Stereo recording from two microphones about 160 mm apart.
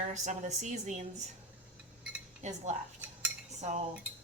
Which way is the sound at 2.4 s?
45° right (ahead or behind).